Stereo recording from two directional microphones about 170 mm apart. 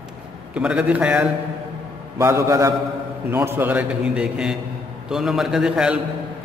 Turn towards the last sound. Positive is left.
turn(degrees=-5)  # may be behind; listen again after turning